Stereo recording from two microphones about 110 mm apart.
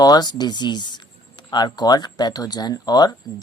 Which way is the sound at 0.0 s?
40° left (ahead or behind).